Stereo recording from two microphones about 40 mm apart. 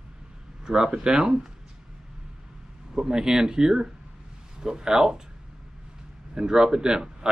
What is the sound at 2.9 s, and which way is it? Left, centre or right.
Speech, centre.